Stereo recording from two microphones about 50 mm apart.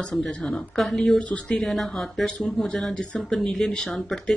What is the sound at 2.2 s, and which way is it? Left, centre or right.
Speech, centre.